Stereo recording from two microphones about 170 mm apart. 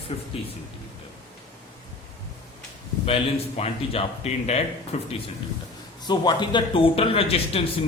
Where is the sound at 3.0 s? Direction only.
35° left (ahead or behind).